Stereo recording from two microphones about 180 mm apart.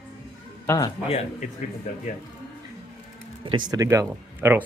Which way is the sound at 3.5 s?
25° right (ahead or behind).